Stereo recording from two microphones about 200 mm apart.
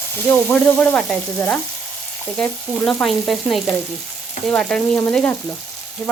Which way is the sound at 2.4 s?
5° left (ahead or behind).